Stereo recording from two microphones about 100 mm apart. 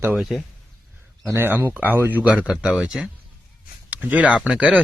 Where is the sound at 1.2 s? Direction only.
25° right (ahead or behind); by 3.0 s 5° right (ahead or behind).